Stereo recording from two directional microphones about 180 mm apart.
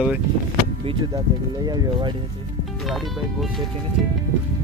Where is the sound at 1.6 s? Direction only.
25° right (ahead or behind).